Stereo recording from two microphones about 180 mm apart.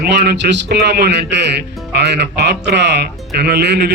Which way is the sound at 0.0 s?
65° right (ahead or behind).